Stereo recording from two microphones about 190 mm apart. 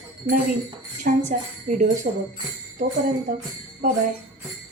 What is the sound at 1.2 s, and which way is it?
Speech, 40° right (ahead or behind).